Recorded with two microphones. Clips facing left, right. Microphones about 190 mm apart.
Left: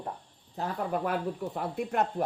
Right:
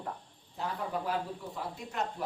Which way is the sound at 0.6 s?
55° left (ahead or behind).